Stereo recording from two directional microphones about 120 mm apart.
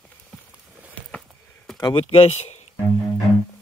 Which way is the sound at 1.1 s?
Centre (ahead or behind).